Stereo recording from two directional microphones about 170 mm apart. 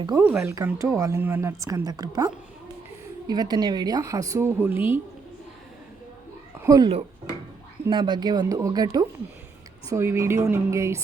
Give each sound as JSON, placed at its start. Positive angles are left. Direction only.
{"t": 0.2, "sound": "a woman's voice", "side_deg": -10}
{"t": 6.6, "sound": "a woman's voice", "side_deg": -20}